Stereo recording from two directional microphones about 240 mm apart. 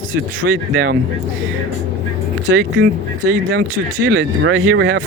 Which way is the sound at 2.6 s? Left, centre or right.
Right.